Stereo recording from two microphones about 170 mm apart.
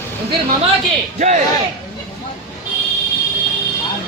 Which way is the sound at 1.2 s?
40° right (ahead or behind).